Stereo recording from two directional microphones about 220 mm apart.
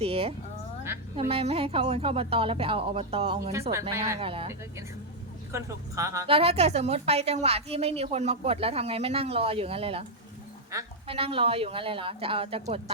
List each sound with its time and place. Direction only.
0.0 s a woman's voice: 25° right (ahead or behind)
3.7 s speech: 10° right (ahead or behind)
4.2 s a woman's voice: 25° right (ahead or behind)
5.5 s speech: 15° right (ahead or behind)
6.3 s a woman's voice: 25° right (ahead or behind)